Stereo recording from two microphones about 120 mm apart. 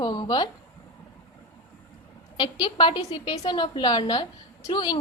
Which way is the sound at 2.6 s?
40° left (ahead or behind).